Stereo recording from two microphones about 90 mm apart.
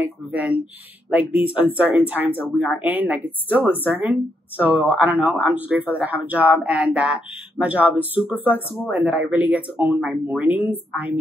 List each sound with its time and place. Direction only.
0.0 s speech: 15° right (ahead or behind)